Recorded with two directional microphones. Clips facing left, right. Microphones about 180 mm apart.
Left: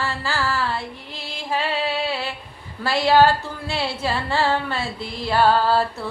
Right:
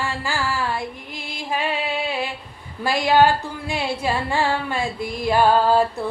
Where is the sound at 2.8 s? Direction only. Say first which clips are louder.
Left 1 dB; 15° right (ahead or behind).